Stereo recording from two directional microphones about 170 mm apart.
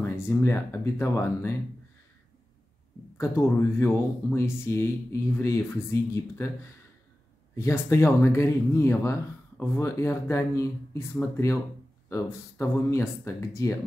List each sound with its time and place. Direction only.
0.0 s speech: 15° left (ahead or behind)
3.2 s speech: 15° left (ahead or behind)